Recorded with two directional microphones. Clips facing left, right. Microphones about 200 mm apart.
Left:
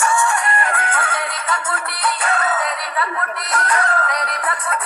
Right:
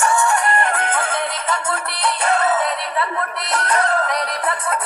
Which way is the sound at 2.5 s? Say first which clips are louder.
Right 3 dB; 35° right (ahead or behind).